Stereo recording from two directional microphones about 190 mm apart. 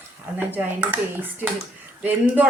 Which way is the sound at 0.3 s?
10° right (ahead or behind).